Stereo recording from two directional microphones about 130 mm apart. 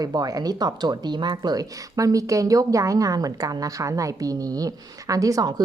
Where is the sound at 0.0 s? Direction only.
30° right (ahead or behind).